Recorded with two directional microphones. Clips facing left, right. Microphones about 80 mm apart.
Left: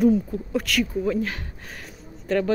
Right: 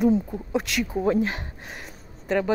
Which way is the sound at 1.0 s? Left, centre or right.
Right.